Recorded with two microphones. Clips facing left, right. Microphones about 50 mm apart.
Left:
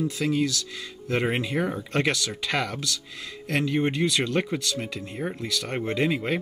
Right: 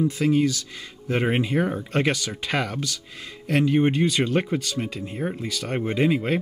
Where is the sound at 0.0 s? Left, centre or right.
Centre.